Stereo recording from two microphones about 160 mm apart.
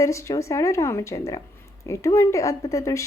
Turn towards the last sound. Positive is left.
turn(degrees=20)  # may be behind; listen again after turning